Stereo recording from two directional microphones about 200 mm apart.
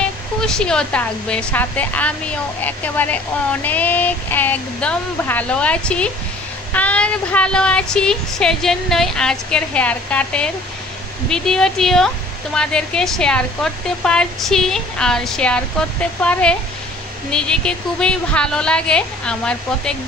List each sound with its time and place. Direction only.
0.4 s speech: 5° left (ahead or behind)